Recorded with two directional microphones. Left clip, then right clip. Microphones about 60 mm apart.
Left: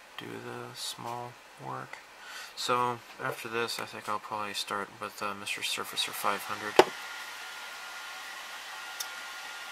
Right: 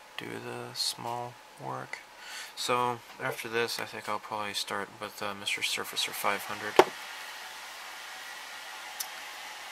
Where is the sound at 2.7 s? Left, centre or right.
Right.